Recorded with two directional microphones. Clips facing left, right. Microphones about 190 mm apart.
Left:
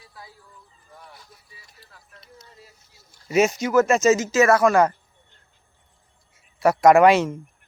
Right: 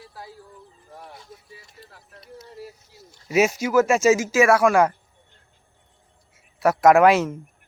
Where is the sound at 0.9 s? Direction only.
35° right (ahead or behind).